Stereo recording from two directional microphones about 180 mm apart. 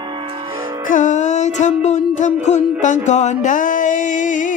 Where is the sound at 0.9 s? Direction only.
45° left (ahead or behind).